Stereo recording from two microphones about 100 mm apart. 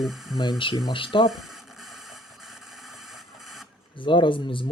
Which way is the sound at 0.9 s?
60° left (ahead or behind).